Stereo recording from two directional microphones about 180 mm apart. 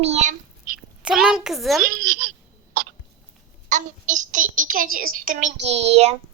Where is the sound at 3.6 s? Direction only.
45° right (ahead or behind).